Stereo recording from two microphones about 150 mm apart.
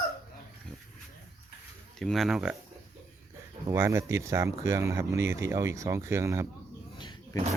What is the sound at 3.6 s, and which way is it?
Speech, 20° right (ahead or behind).